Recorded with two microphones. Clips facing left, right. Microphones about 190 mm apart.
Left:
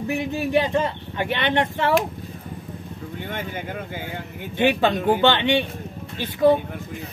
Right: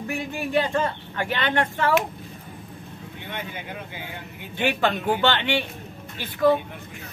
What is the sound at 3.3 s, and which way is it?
Speech, 45° left (ahead or behind).